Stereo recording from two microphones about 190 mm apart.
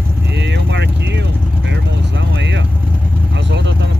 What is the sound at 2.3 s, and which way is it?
Vehicle, 70° right (ahead or behind).